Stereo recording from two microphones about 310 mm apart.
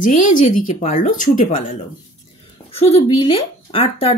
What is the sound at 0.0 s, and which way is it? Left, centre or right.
Speech, left.